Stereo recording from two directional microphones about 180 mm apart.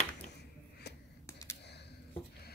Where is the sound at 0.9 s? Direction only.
70° left (ahead or behind).